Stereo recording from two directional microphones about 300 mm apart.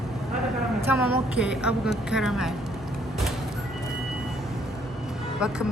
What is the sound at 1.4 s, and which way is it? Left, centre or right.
Speech, centre.